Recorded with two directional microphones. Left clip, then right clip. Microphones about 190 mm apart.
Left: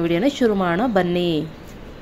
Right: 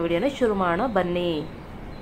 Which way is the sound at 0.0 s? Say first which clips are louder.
Left 4 dB; 40° left (ahead or behind).